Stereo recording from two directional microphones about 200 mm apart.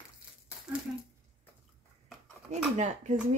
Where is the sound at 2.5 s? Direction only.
35° right (ahead or behind).